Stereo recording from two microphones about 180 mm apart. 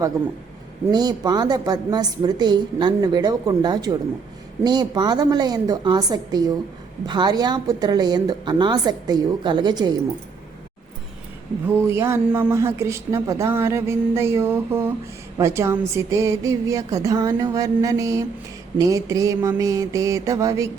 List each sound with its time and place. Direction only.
0.9 s a woman's voice: 20° right (ahead or behind)
11.8 s speech: 15° right (ahead or behind)